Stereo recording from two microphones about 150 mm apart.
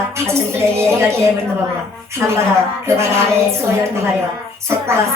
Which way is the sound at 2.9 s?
20° right (ahead or behind).